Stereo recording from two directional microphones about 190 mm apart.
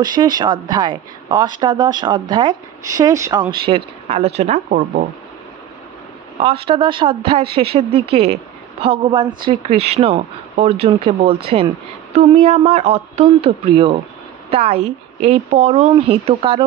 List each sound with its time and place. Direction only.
0.0 s a woman's voice: 20° right (ahead or behind); by 5.0 s 40° right (ahead or behind)
6.4 s a woman's voice: 30° right (ahead or behind)
9.4 s a woman's voice: 30° right (ahead or behind)